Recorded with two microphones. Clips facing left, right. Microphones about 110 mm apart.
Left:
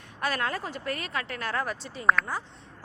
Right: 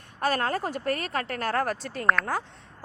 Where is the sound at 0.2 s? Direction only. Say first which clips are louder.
Right 4 dB; 40° right (ahead or behind).